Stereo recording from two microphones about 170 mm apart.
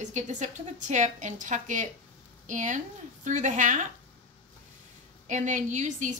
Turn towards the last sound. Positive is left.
turn(degrees=-45)  # may be behind; listen again after turning